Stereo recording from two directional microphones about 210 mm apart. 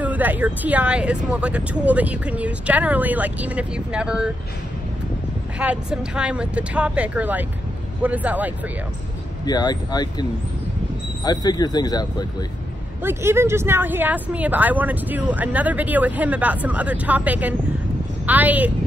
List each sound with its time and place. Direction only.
0.0 s speech: 10° right (ahead or behind)
5.6 s speech: 5° right (ahead or behind)
9.5 s speech: 20° left (ahead or behind)
11.2 s speech: 20° left (ahead or behind)
13.0 s speech: 10° right (ahead or behind)